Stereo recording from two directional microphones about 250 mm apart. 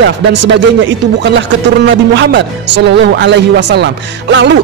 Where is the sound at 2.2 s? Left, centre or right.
Right.